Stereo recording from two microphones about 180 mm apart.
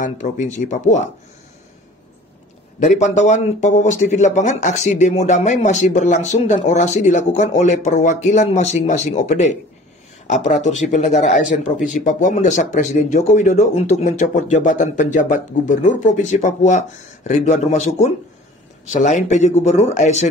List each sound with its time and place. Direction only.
0.0 s speech: 40° left (ahead or behind)
2.8 s speech: 40° left (ahead or behind)